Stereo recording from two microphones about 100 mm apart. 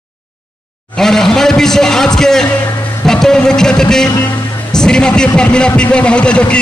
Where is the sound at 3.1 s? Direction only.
5° left (ahead or behind).